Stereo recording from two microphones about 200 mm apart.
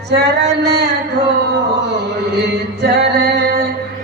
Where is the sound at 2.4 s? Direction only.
55° right (ahead or behind).